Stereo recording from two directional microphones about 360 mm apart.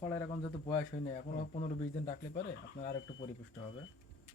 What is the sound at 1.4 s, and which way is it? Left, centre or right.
Speech, centre.